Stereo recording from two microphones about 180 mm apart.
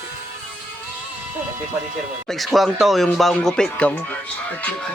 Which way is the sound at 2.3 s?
Centre (ahead or behind).